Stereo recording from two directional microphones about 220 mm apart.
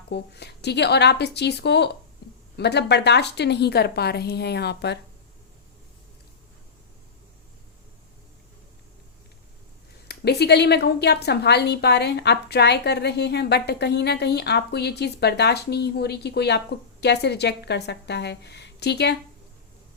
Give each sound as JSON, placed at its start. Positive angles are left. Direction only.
{"t": 0.1, "sound": "a woman's voice", "side_deg": 50}
{"t": 10.1, "sound": "a woman's voice", "side_deg": 50}